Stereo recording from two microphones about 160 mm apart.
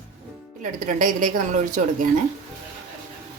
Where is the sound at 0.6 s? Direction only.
55° right (ahead or behind).